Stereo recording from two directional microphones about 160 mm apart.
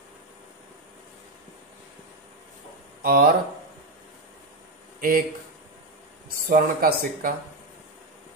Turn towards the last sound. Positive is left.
turn(degrees=-65)  # may be behind; listen again after turning